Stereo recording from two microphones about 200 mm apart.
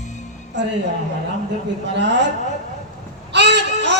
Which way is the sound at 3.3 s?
60° right (ahead or behind).